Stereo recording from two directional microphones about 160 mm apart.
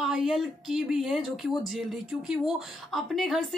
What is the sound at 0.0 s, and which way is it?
Speech, centre (ahead or behind).